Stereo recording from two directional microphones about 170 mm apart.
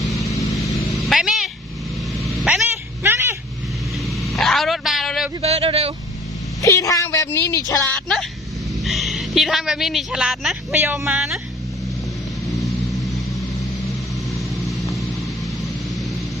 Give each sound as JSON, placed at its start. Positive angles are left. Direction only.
{"t": 0.2, "sound": "vehicle", "side_deg": 20}
{"t": 1.1, "sound": "a sound", "side_deg": 0}
{"t": 2.1, "sound": "vehicle", "side_deg": 0}
{"t": 3.0, "sound": "a sound", "side_deg": -15}
{"t": 4.0, "sound": "vehicle", "side_deg": 0}
{"t": 5.4, "sound": "a sound", "side_deg": -35}
{"t": 6.6, "sound": "speech", "side_deg": 20}
{"t": 7.9, "sound": "a woman's voice", "side_deg": 5}
{"t": 12.5, "sound": "vehicle", "side_deg": 0}